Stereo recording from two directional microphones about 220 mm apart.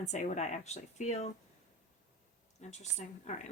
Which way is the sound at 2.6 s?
30° left (ahead or behind).